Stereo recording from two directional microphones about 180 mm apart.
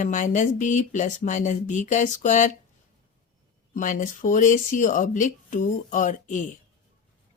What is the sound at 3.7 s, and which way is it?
Speech, 45° left (ahead or behind).